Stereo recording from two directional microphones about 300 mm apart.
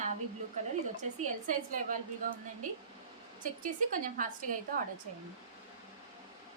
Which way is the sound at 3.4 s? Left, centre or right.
Right.